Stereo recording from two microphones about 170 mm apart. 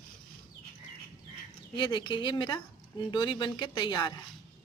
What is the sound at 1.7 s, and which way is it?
A woman's voice, 30° left (ahead or behind).